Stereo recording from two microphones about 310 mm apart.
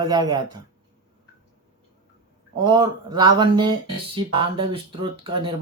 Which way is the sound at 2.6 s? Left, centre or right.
Centre.